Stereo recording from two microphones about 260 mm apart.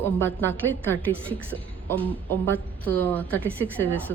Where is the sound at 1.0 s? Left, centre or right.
Centre.